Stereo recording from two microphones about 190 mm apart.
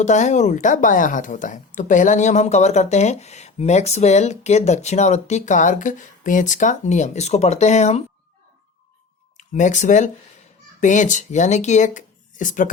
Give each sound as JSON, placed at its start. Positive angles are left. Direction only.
{"t": 0.0, "sound": "speech", "side_deg": 40}
{"t": 9.4, "sound": "speech", "side_deg": 40}